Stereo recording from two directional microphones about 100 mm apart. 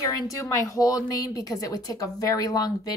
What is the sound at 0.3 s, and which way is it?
A woman's voice, 35° left (ahead or behind).